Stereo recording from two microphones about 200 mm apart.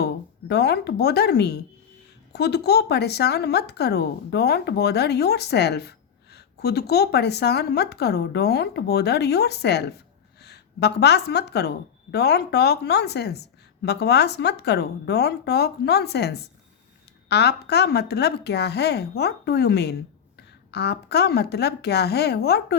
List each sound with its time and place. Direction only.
0.0 s a woman's voice: 55° left (ahead or behind)